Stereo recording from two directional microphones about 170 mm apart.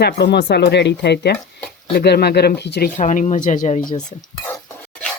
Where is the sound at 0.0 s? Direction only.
75° left (ahead or behind).